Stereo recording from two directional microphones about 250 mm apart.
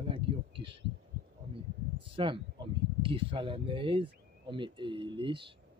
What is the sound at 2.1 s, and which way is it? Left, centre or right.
Speech, centre.